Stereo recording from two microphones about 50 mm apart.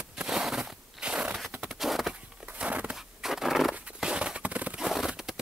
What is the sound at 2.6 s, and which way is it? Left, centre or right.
Crushing, right.